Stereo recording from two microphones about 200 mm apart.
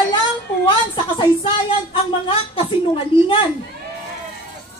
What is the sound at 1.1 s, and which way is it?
A woman's voice, 25° left (ahead or behind).